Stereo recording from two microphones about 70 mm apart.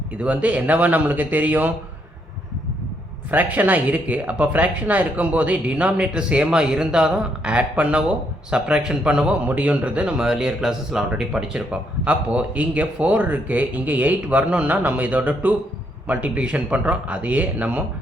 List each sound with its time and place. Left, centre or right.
0.2 s speech: centre
3.3 s a man's voice: right